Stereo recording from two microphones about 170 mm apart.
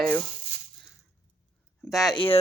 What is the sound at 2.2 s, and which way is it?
Speech, 30° left (ahead or behind).